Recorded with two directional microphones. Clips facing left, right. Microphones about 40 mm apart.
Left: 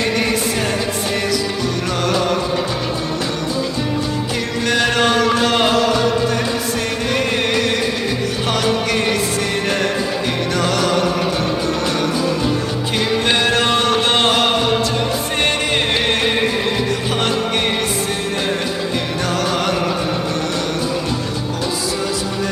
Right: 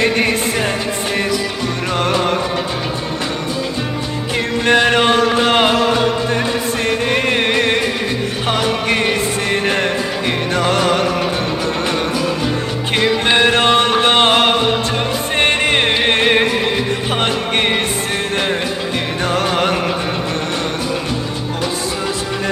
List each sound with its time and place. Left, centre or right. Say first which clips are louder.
0.0 s music: right 3 dB; right
1.9 s music: right 3 dB; right
4.4 s music: right 6 dB; right
6.8 s music: right 5 dB; right
13.2 s music: right 4 dB; right
19.2 s music: right 4 dB; right